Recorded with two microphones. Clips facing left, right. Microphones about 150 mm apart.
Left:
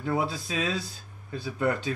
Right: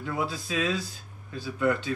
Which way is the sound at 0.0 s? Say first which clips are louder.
Left 3 dB; 35° left (ahead or behind).